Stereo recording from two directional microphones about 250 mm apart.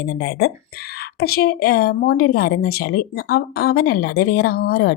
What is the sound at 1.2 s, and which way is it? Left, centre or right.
Speech, left.